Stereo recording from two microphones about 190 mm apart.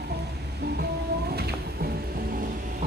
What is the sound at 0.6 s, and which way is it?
Music, 55° right (ahead or behind).